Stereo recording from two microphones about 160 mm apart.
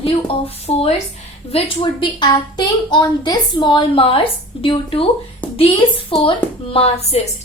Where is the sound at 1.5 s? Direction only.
30° left (ahead or behind).